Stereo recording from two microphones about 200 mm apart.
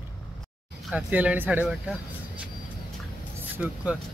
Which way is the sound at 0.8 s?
5° right (ahead or behind).